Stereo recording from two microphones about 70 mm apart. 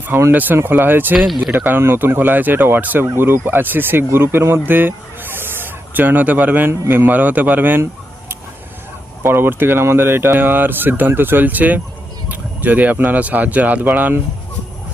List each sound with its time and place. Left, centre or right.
0.3 s speech: right
9.2 s speech: right